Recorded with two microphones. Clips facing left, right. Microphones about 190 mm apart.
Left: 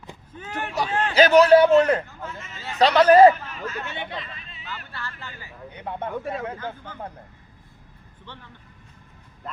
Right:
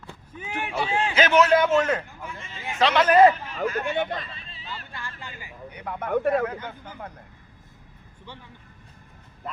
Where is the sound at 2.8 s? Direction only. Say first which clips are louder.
Left 4 dB; 35° left (ahead or behind).